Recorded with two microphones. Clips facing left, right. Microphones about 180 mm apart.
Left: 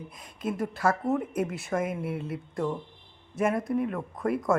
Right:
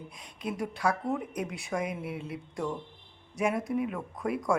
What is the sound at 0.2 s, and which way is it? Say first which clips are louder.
Speech: left 3 dB; centre (ahead or behind).